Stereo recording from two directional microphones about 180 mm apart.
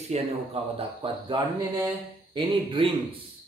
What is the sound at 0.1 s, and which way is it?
Speech, 35° right (ahead or behind).